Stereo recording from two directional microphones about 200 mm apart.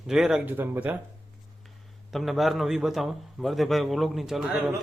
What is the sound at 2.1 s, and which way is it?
A man's voice, centre (ahead or behind).